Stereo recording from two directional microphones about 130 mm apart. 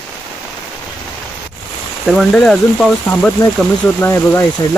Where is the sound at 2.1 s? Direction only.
Centre (ahead or behind).